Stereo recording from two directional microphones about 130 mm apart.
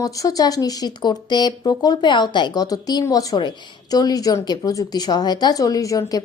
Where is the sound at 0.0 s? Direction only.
25° left (ahead or behind).